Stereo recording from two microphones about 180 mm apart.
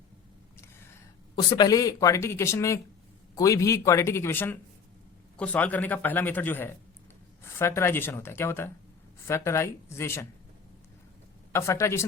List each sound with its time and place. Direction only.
1.4 s speech: 20° left (ahead or behind)
11.5 s speech: 15° left (ahead or behind)